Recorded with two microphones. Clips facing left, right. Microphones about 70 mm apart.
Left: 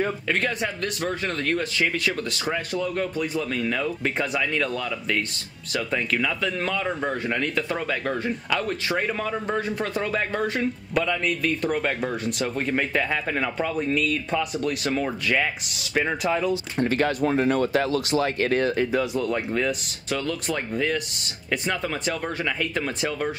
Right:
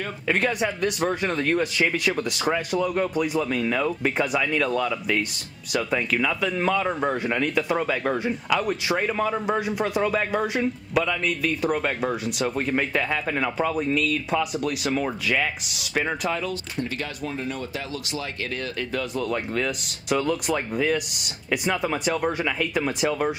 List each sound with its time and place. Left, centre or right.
0.3 s a man's voice: centre
16.3 s speech: centre
16.7 s speech: left
18.8 s speech: centre
19.1 s a man's voice: centre
20.1 s speech: centre